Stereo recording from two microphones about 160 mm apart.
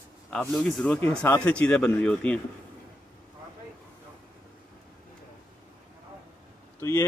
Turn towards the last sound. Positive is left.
turn(degrees=15)  # may be behind; listen again after turning